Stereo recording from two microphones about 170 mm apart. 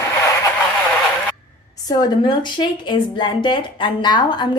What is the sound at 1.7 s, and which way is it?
A woman's voice, 25° left (ahead or behind).